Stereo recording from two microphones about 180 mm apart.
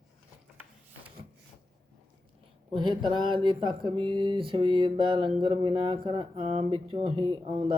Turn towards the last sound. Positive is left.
turn(degrees=-25)  # may be behind; listen again after turning